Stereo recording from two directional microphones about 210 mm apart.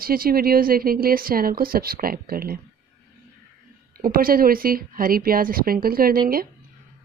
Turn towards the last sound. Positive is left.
turn(degrees=-45)  # may be behind; listen again after turning